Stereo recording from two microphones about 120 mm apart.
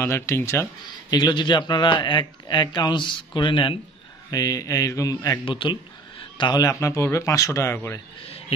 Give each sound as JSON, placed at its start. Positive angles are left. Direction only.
{"t": 0.0, "sound": "a man's voice", "side_deg": 20}
{"t": 1.1, "sound": "speech", "side_deg": 35}
{"t": 4.3, "sound": "a man's voice", "side_deg": 30}
{"t": 5.4, "sound": "a man's voice", "side_deg": 45}